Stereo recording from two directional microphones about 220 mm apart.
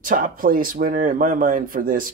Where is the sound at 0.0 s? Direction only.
40° right (ahead or behind).